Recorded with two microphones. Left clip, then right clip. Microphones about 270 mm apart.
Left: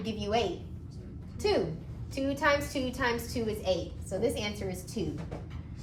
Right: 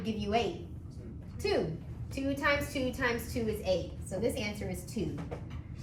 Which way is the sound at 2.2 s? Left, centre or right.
Centre.